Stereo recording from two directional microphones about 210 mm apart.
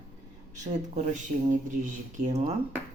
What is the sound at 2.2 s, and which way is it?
Speech, 35° right (ahead or behind).